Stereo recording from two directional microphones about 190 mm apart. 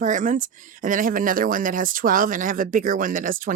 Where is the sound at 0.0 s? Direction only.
40° right (ahead or behind).